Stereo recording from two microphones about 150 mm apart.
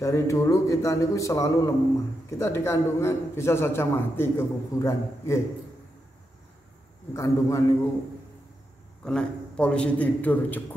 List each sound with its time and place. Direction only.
0.0 s a man's voice: 20° left (ahead or behind)
7.2 s a man's voice: 20° left (ahead or behind)
9.0 s a man's voice: 5° left (ahead or behind)